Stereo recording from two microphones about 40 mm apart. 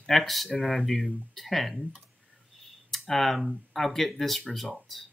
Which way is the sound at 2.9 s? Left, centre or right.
Centre.